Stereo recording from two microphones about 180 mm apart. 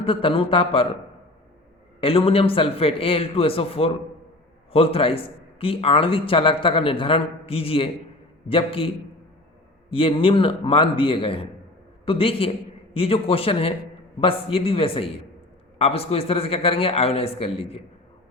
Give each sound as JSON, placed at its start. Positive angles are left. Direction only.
{"t": 0.0, "sound": "a man's voice", "side_deg": 30}
{"t": 2.0, "sound": "a man's voice", "side_deg": 30}
{"t": 9.9, "sound": "a man's voice", "side_deg": 30}